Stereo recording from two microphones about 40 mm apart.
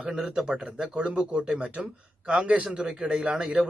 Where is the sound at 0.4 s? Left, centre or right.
Right.